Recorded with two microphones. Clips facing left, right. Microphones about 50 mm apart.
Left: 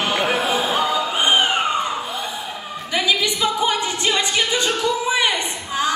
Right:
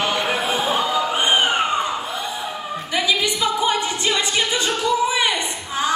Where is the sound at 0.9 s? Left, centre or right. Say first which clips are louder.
Even; right.